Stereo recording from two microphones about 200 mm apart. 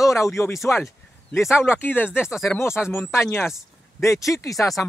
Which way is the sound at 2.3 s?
Centre (ahead or behind).